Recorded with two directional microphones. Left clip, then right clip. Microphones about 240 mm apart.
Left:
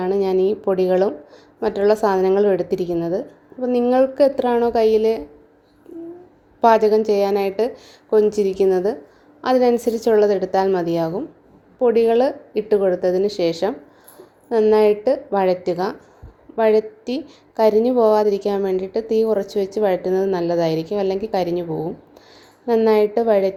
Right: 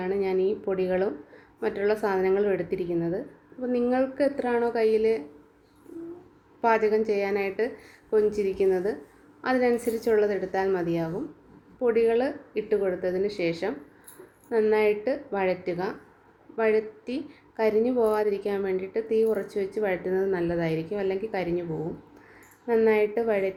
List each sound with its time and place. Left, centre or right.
0.0 s a woman's voice: left
6.6 s a woman's voice: left
22.6 s a woman's voice: left